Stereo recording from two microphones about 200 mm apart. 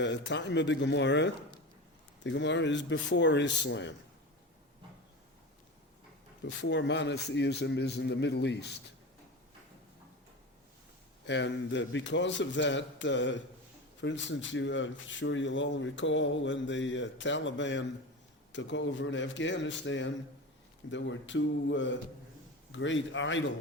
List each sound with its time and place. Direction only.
0.0 s a man's voice: 60° left (ahead or behind)
6.4 s a man's voice: 60° left (ahead or behind)
11.3 s a man's voice: 65° left (ahead or behind)